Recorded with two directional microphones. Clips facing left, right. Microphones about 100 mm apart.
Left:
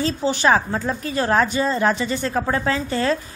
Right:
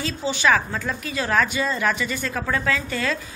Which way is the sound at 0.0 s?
40° left (ahead or behind).